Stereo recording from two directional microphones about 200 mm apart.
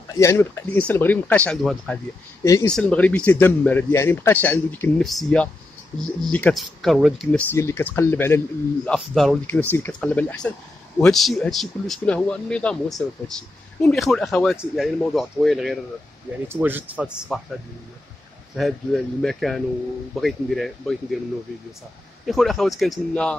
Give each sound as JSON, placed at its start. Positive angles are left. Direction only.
{"t": 0.1, "sound": "speech", "side_deg": 15}
{"t": 2.4, "sound": "speech", "side_deg": 15}
{"t": 7.5, "sound": "speech", "side_deg": 10}
{"t": 18.6, "sound": "speech", "side_deg": 0}
{"t": 22.2, "sound": "speech", "side_deg": 0}